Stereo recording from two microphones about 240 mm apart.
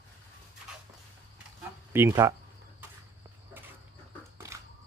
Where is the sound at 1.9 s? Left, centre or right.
Centre.